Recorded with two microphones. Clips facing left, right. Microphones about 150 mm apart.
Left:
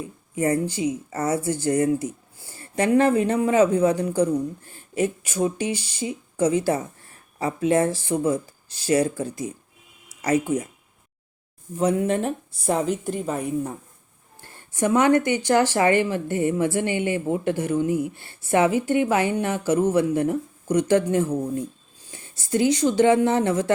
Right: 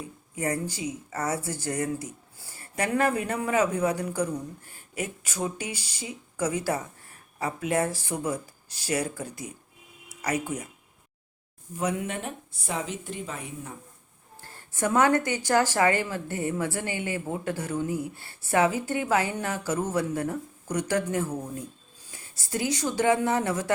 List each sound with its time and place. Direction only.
0.3 s speech: 25° left (ahead or behind)
11.8 s a woman's voice: 35° left (ahead or behind)
14.5 s speech: 20° left (ahead or behind)